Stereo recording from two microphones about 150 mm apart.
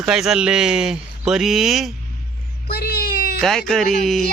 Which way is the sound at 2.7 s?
90° left.